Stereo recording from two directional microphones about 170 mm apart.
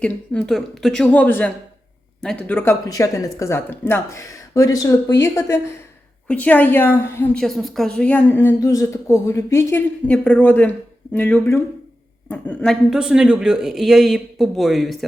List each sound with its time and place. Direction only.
0.0 s a woman's voice: 5° left (ahead or behind)
7.4 s a woman's voice: centre (ahead or behind)